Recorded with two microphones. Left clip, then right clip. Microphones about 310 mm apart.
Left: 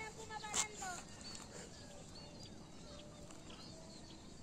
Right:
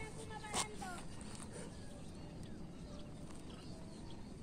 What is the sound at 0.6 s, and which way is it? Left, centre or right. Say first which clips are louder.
Vehicle: even; centre.